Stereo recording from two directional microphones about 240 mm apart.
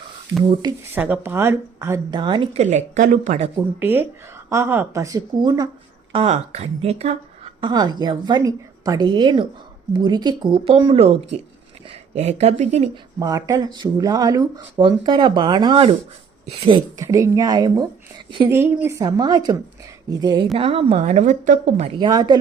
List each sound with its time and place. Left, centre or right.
0.6 s speech: centre; by 3.5 s right
3.8 s speech: centre; by 12.9 s right
13.1 s speech: centre